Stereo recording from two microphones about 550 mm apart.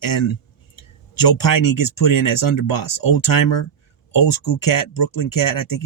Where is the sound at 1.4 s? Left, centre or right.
Left.